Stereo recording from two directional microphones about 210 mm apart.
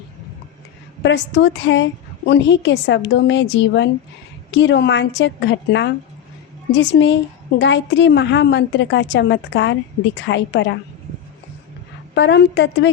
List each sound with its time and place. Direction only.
1.0 s a woman's voice: 55° left (ahead or behind)
12.1 s a woman's voice: 55° left (ahead or behind)